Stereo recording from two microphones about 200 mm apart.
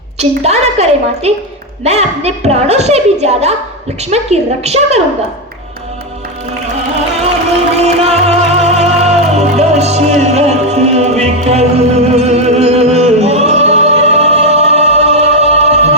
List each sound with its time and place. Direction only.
0.2 s a woman's voice: 35° right (ahead or behind)
7.8 s music: 35° right (ahead or behind)